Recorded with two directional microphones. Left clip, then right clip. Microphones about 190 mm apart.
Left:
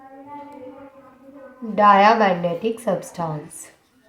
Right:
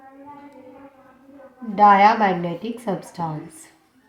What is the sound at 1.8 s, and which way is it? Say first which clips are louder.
A woman's voice: even; 35° left (ahead or behind).